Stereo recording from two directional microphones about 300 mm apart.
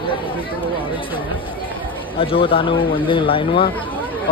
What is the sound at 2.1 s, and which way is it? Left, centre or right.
Speech, centre.